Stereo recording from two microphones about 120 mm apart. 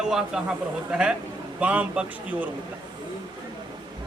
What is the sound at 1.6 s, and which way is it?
Speech, 10° right (ahead or behind).